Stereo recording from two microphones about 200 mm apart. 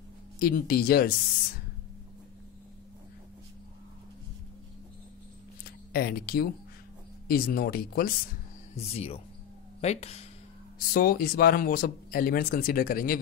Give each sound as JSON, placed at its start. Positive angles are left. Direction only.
{"t": 0.4, "sound": "speech", "side_deg": 45}
{"t": 5.9, "sound": "speech", "side_deg": 50}
{"t": 8.7, "sound": "speech", "side_deg": 30}
{"t": 10.9, "sound": "speech", "side_deg": 50}